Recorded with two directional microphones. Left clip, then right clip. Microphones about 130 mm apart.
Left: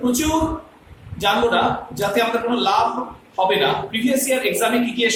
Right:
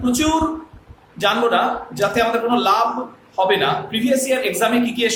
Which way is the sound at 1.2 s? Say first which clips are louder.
Right 1 dB; 25° right (ahead or behind).